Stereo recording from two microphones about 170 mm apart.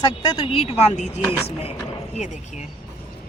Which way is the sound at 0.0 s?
30° left (ahead or behind).